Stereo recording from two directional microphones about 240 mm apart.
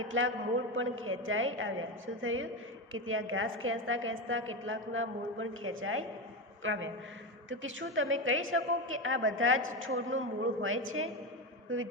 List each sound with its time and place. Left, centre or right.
0.0 s a woman's voice: right